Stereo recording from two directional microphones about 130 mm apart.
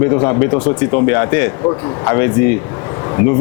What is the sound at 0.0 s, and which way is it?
Speech, 20° left (ahead or behind).